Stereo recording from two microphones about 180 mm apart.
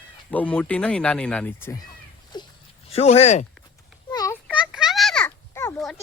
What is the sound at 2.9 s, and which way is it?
Speech, 35° left (ahead or behind).